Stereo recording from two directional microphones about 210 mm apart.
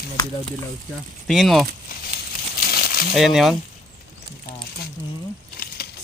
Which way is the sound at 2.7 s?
50° left (ahead or behind).